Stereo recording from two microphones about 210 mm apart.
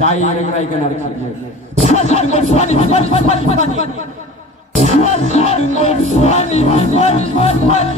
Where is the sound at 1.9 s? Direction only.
30° left (ahead or behind).